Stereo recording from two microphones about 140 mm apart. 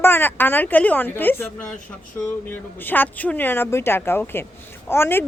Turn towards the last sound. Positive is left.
turn(degrees=15)  # may be behind; listen again after turning